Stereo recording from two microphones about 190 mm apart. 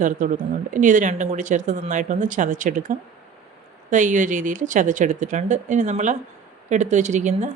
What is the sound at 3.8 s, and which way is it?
Speech, 40° right (ahead or behind).